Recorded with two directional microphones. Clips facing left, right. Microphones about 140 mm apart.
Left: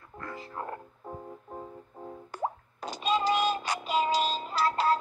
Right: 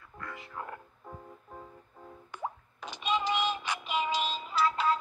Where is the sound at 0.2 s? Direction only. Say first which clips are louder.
Left 3 dB; 30° left (ahead or behind).